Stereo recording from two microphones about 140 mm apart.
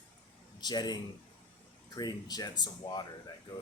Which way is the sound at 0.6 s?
30° left (ahead or behind).